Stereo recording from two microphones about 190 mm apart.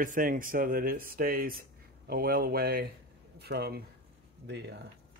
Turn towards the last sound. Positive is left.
turn(degrees=-65)  # may be behind; listen again after turning